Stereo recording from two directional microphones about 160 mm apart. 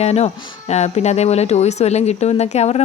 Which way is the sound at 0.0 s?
40° left (ahead or behind).